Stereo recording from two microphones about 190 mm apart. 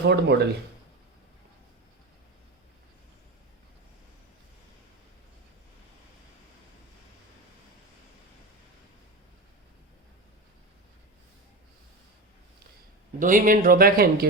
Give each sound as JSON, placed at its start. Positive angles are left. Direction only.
{"t": 0.1, "sound": "speech", "side_deg": -65}
{"t": 13.1, "sound": "speech", "side_deg": -45}